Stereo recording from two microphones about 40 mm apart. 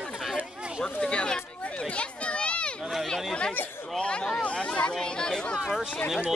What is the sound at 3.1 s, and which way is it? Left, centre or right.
Chatter, left.